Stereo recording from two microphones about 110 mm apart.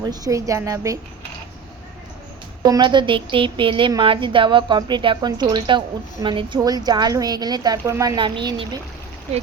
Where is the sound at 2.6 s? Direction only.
40° right (ahead or behind).